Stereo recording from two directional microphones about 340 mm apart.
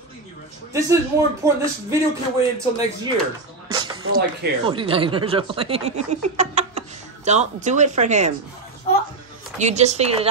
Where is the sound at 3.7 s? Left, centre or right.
Centre.